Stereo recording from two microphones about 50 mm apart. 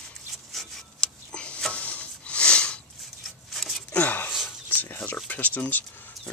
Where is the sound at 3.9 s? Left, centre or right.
Left.